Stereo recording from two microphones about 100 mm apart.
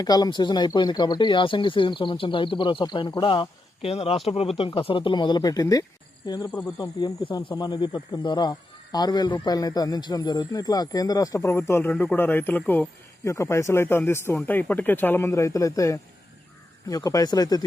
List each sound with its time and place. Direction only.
0.0 s speech: 40° left (ahead or behind)
3.8 s speech: 75° left (ahead or behind); by 12.8 s 20° left (ahead or behind)
13.2 s a man's voice: 30° left (ahead or behind)